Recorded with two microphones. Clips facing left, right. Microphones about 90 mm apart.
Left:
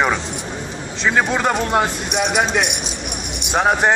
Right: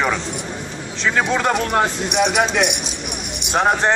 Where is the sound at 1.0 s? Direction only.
10° left (ahead or behind).